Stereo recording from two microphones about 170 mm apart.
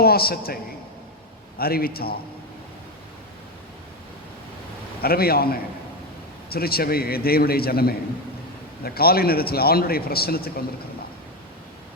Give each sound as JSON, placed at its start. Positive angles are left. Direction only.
{"t": 0.0, "sound": "a man's voice", "side_deg": 65}
{"t": 5.0, "sound": "speech", "side_deg": 65}